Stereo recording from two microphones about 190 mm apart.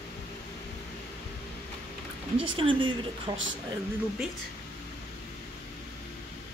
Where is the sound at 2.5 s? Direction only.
25° right (ahead or behind).